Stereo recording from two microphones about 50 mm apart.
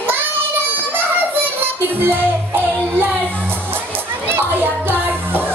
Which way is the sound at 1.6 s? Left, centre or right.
Right.